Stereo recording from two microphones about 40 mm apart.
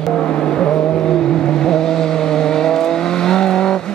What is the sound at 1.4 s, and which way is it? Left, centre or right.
Vehicle, centre.